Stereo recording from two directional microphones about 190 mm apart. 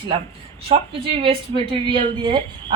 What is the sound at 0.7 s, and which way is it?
Speech, 30° right (ahead or behind).